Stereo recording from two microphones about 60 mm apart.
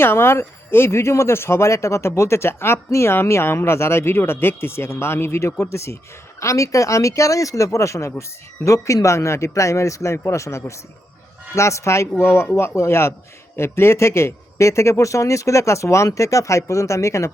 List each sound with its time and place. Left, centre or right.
0.0 s speech: left
12.2 s speech: left